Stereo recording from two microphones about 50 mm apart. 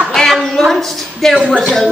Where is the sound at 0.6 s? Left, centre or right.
Centre.